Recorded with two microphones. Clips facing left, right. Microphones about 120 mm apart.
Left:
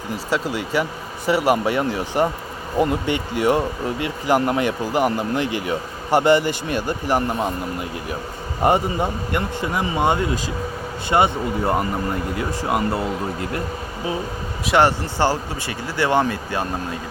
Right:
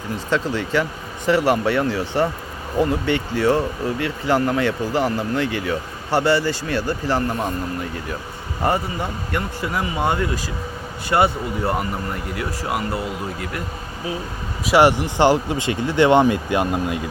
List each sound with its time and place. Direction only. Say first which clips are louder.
0.3 s speech: right 2 dB; 10° left (ahead or behind)
8.6 s a man's voice: left 3 dB; 20° left (ahead or behind)
14.8 s speech: right 3 dB; 15° right (ahead or behind)